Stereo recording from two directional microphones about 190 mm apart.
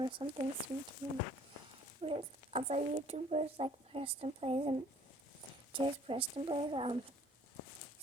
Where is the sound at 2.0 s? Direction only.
30° right (ahead or behind).